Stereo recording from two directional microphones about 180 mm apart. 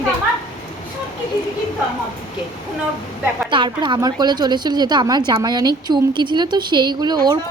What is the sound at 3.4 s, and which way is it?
A woman's voice, 25° right (ahead or behind).